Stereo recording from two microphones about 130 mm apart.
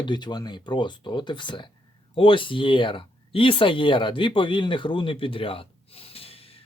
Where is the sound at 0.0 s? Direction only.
35° left (ahead or behind).